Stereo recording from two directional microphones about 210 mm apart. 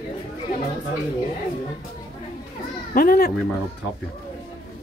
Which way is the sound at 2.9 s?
45° left (ahead or behind).